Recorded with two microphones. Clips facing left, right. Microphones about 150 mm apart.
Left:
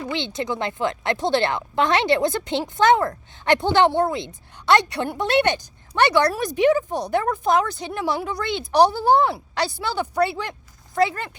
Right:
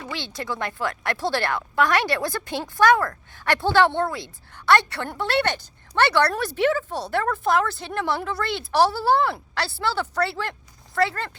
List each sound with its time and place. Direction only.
0.1 s a woman's voice: 20° left (ahead or behind)